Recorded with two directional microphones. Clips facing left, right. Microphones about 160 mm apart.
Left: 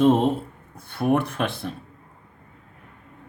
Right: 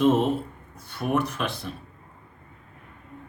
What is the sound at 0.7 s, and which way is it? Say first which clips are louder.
Speech: left 4 dB; 55° left (ahead or behind).